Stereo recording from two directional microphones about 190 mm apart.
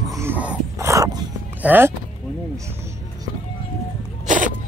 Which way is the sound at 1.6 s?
10° right (ahead or behind).